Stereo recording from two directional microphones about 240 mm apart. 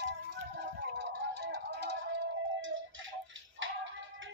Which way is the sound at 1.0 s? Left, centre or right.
Right.